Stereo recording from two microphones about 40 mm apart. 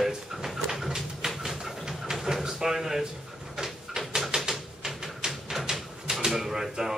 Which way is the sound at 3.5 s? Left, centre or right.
Centre.